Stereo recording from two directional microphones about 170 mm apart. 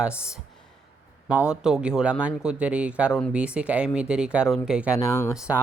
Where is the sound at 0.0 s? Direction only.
5° right (ahead or behind).